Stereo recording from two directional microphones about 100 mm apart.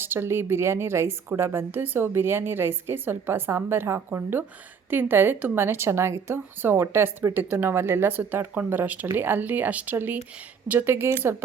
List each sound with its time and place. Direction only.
0.0 s a woman's voice: 25° right (ahead or behind)